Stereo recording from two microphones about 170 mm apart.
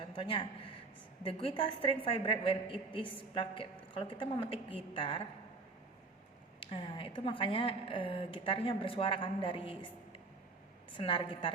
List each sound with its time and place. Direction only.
0.2 s a man's voice: 30° left (ahead or behind)
6.6 s a woman's voice: 30° left (ahead or behind)
10.9 s a woman's voice: 30° left (ahead or behind)